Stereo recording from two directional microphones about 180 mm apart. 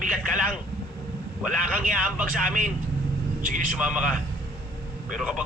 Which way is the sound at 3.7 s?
5° right (ahead or behind).